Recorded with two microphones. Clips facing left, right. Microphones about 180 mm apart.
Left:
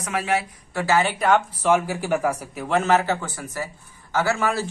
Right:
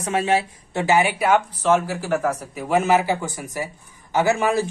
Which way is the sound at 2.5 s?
5° right (ahead or behind).